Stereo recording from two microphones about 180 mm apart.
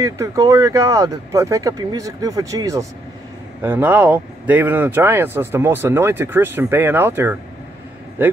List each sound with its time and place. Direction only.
0.0 s speech: 20° right (ahead or behind)